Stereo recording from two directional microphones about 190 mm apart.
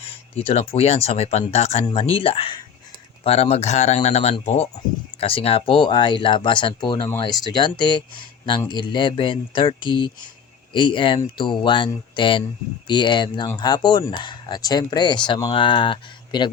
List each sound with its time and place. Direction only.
0.3 s speech: 30° left (ahead or behind)